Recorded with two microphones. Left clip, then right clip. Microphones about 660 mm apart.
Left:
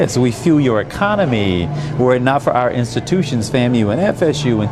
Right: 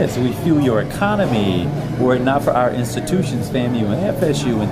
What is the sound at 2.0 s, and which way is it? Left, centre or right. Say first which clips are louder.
Speech: left 2 dB; left.